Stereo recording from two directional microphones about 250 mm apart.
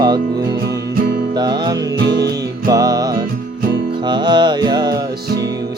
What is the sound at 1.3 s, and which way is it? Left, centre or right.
Music, centre.